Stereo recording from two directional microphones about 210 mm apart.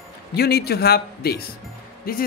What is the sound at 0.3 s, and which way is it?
Speech, 50° left (ahead or behind).